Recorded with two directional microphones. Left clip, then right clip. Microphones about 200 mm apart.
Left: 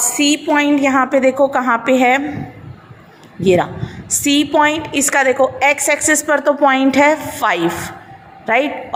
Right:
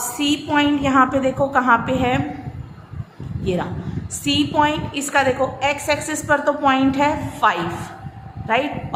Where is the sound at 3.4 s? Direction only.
30° left (ahead or behind).